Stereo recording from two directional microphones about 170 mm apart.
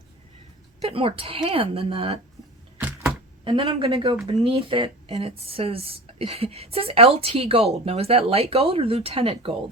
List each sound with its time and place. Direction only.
0.8 s speech: 35° right (ahead or behind)
3.4 s speech: 30° right (ahead or behind)